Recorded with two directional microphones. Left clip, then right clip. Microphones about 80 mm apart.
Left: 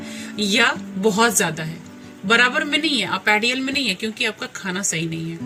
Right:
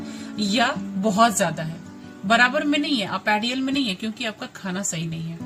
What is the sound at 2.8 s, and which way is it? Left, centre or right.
A man's voice, right.